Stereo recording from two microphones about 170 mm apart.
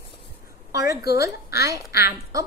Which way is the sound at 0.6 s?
20° right (ahead or behind).